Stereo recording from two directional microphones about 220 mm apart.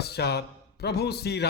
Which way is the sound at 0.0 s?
45° left (ahead or behind).